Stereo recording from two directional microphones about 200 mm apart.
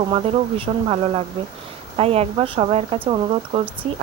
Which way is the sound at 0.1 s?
25° right (ahead or behind).